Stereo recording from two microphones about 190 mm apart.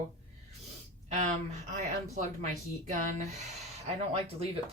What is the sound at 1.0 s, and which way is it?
Speech, 40° right (ahead or behind).